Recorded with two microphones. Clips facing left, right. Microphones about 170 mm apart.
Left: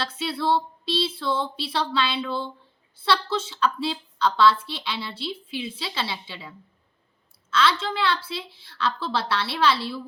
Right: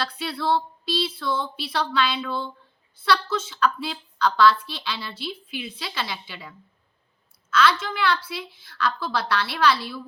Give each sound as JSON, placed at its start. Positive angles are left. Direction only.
{"t": 0.0, "sound": "a woman's voice", "side_deg": 25}
{"t": 7.5, "sound": "a woman's voice", "side_deg": 30}